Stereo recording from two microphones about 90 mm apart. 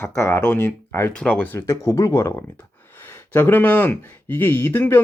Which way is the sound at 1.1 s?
15° left (ahead or behind).